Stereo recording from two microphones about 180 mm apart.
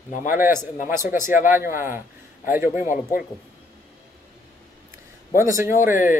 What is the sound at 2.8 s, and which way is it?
Speech, 45° left (ahead or behind).